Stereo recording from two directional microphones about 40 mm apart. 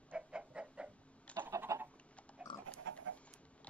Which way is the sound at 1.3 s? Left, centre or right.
Right.